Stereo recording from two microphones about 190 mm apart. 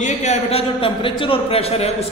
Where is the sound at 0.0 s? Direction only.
40° left (ahead or behind).